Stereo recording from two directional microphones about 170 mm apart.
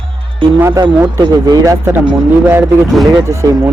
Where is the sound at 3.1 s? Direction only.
15° right (ahead or behind).